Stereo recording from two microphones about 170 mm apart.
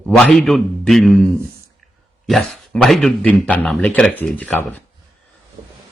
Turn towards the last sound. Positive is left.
turn(degrees=-25)  # may be behind; listen again after turning